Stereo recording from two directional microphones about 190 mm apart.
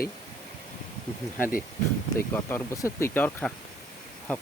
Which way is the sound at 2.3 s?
10° left (ahead or behind).